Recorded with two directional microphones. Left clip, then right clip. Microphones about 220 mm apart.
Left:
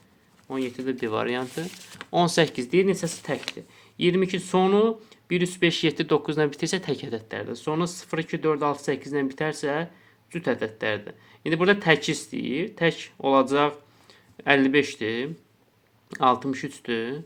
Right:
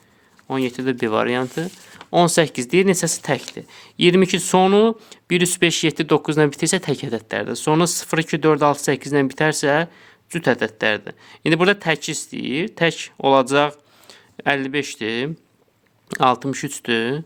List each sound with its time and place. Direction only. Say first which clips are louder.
0.4 s speech: right 7 dB; 45° right (ahead or behind); by 2.6 s 30° right (ahead or behind)
2.6 s speech: right 5 dB; 40° right (ahead or behind)